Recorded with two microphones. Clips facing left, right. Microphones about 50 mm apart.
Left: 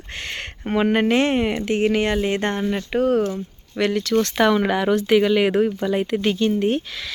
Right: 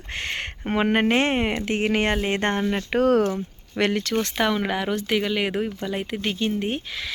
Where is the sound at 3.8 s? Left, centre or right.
Right.